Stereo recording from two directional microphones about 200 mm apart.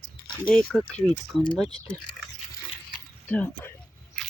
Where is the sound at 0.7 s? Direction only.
5° left (ahead or behind).